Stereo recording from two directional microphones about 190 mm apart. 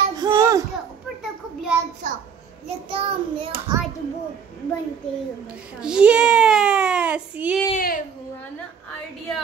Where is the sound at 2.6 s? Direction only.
30° right (ahead or behind).